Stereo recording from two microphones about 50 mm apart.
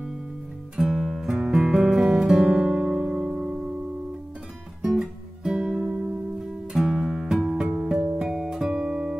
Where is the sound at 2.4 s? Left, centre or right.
Right.